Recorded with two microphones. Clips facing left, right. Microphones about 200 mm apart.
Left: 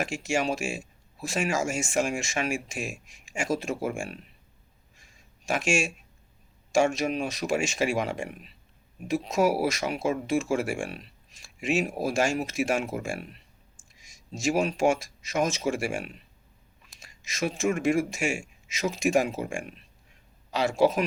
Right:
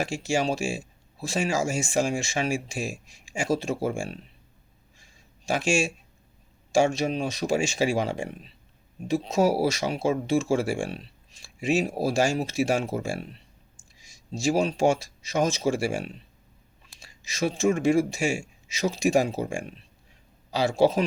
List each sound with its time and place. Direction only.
0.0 s speech: 35° right (ahead or behind)
5.5 s speech: 30° right (ahead or behind)